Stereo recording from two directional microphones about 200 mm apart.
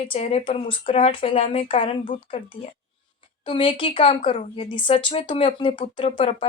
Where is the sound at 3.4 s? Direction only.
25° left (ahead or behind).